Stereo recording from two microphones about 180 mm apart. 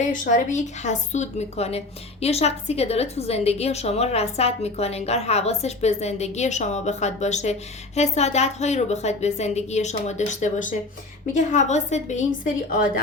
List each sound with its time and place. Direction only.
0.1 s a woman's voice: 45° left (ahead or behind)